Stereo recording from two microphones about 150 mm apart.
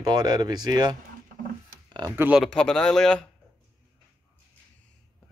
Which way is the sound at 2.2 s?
10° right (ahead or behind).